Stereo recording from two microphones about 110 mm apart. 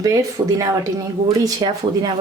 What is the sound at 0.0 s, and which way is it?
Speech, 30° right (ahead or behind).